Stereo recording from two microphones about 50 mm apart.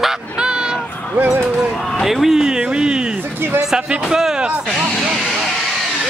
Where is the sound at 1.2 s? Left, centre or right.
Right.